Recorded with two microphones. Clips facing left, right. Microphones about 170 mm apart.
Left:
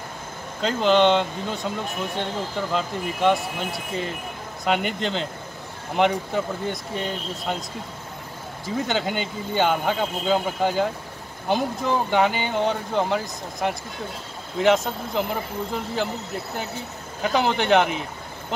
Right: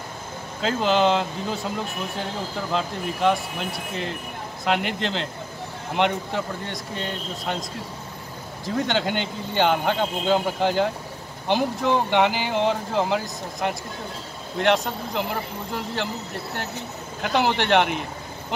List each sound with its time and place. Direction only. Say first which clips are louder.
0.6 s speech: left 2 dB; centre (ahead or behind)
2.7 s speech: even; centre (ahead or behind)
8.6 s speech: right 1 dB; centre (ahead or behind)
17.2 s speech: even; centre (ahead or behind)